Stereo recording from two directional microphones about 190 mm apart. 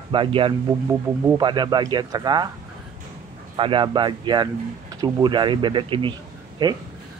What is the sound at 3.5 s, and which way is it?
Speech, 25° right (ahead or behind).